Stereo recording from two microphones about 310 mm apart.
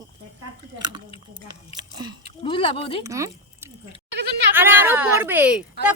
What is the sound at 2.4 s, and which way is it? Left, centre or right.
Speech, centre.